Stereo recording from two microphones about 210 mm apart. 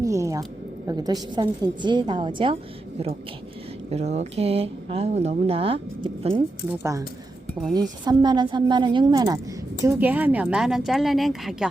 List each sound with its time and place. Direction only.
0.0 s a sound: 15° right (ahead or behind)
0.9 s speech: 20° right (ahead or behind)
3.8 s speech: 30° right (ahead or behind)
7.7 s a woman's voice: 20° right (ahead or behind); by 11.7 s centre (ahead or behind)